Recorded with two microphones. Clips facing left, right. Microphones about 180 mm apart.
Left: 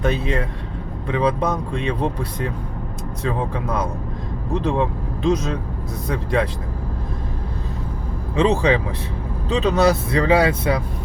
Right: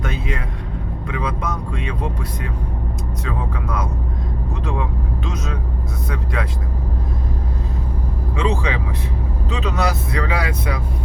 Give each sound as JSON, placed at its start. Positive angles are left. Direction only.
{"t": 0.0, "sound": "a sound", "side_deg": 30}
{"t": 1.0, "sound": "speech", "side_deg": 30}
{"t": 8.4, "sound": "speech", "side_deg": 30}